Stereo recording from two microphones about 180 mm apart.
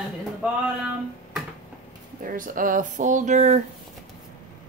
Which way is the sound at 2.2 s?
50° right (ahead or behind).